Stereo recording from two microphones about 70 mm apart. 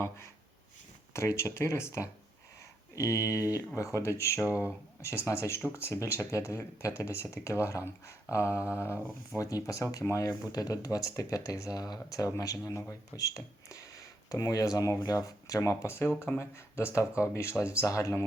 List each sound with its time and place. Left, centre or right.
1.1 s speech: left
2.9 s speech: left
4.4 s speech: right
5.0 s speech: left
9.3 s speech: left
9.6 s speech: left
10.5 s speech: left
15.7 s speech: left